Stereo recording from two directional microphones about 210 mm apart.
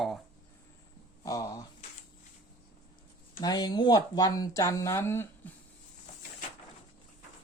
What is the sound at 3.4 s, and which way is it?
Speech, 20° left (ahead or behind).